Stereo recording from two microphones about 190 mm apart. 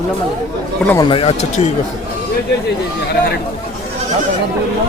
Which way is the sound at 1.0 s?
30° left (ahead or behind).